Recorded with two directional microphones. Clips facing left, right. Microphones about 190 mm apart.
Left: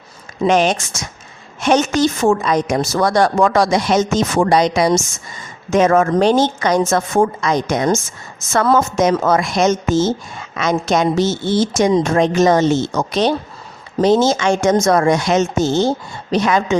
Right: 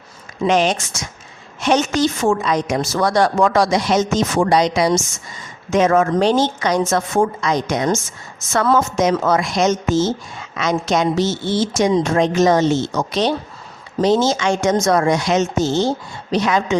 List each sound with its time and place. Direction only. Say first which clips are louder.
0.4 s a woman's voice: left 2 dB; 50° left (ahead or behind)